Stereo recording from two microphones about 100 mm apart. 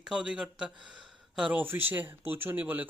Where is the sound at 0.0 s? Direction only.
10° right (ahead or behind).